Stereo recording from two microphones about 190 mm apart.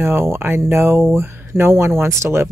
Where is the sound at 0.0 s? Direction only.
15° right (ahead or behind).